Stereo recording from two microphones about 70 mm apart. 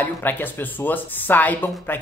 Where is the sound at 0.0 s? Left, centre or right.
Left.